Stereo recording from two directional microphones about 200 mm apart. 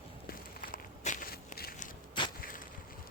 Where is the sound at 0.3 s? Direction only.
45° left (ahead or behind).